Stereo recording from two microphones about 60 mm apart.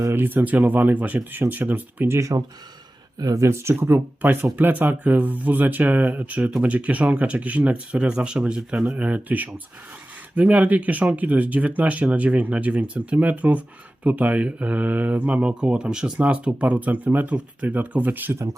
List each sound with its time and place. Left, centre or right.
0.1 s speech: right
2.0 s speech: right